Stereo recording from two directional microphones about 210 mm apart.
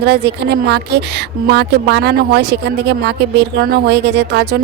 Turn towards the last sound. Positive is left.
turn(degrees=-50)  # may be behind; listen again after turning